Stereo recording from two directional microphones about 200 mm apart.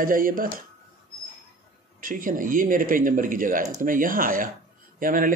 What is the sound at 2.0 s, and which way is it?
Speech, 45° right (ahead or behind).